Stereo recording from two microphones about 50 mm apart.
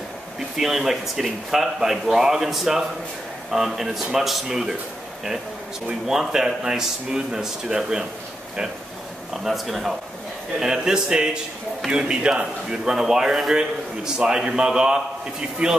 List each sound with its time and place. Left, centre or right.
0.6 s a man's voice: centre
6.0 s a man's voice: centre
9.3 s a man's voice: centre
10.6 s a man's voice: centre